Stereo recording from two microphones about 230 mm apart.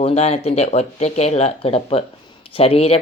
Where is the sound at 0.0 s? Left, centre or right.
Left.